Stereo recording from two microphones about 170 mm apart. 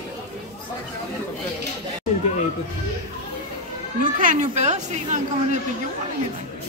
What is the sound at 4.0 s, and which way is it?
Speech, 50° right (ahead or behind).